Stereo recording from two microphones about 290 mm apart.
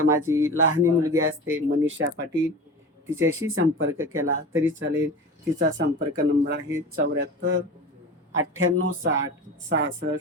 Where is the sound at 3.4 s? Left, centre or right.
Right.